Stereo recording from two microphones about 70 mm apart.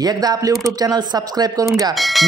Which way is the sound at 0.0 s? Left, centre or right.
Right.